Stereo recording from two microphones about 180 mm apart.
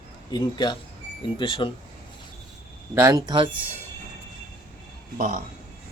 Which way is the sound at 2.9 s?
15° right (ahead or behind).